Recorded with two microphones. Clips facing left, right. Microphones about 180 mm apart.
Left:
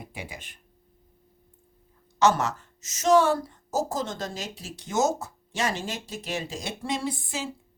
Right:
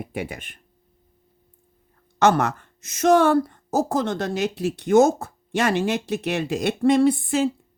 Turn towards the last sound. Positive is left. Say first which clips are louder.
# right 13 dB
turn(degrees=-60)  # may be behind; listen again after turning